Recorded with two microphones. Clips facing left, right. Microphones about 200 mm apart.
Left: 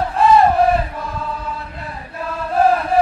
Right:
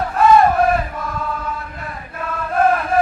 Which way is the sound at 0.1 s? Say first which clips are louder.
Right 1 dB; 30° left (ahead or behind).